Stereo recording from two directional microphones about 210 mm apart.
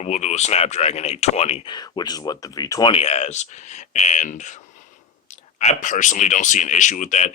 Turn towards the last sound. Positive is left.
turn(degrees=35)  # may be behind; listen again after turning